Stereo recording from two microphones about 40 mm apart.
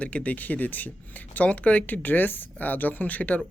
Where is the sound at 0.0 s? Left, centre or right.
Left.